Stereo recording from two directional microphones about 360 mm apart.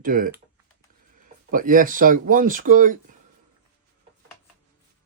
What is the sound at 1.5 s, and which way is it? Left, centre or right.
Speech, right.